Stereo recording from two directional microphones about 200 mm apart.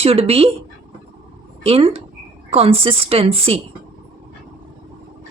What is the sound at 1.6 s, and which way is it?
A woman's voice, 30° right (ahead or behind).